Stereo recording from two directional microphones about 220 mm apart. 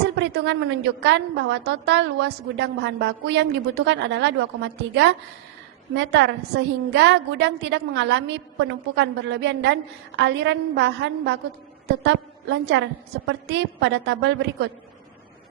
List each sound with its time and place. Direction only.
0.2 s a woman's voice: 55° right (ahead or behind)